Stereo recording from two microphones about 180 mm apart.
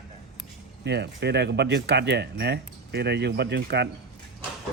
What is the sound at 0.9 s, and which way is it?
Speech, 70° right (ahead or behind).